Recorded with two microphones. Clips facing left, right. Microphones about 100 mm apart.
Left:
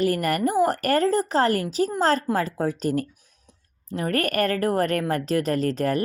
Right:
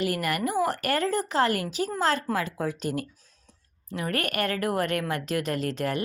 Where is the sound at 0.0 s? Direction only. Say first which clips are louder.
Left 5 dB; 40° left (ahead or behind).